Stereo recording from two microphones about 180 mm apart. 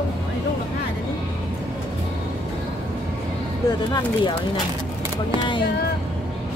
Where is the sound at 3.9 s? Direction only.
25° left (ahead or behind).